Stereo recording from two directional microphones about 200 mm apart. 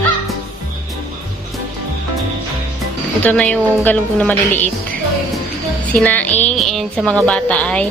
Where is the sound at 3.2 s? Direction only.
5° left (ahead or behind).